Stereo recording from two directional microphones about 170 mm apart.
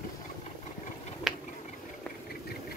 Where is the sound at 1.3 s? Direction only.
Centre (ahead or behind).